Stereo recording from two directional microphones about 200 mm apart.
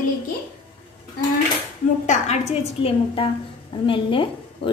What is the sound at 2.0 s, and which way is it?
A woman's voice, 35° left (ahead or behind).